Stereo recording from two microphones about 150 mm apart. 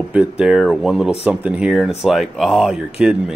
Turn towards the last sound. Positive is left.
turn(degrees=-5)  # may be behind; listen again after turning